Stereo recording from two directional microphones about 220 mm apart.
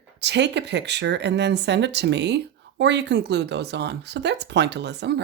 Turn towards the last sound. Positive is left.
turn(degrees=-50)  # may be behind; listen again after turning